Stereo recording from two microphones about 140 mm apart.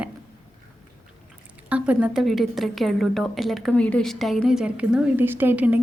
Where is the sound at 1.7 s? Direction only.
10° right (ahead or behind).